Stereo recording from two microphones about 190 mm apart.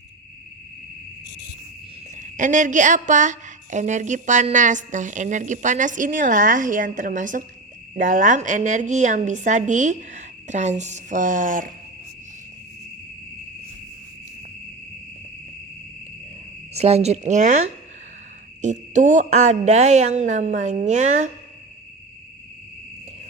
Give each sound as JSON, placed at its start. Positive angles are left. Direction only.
{"t": 2.1, "sound": "a woman's voice", "side_deg": -40}
{"t": 16.7, "sound": "a woman's voice", "side_deg": -35}
{"t": 18.6, "sound": "a woman's voice", "side_deg": -40}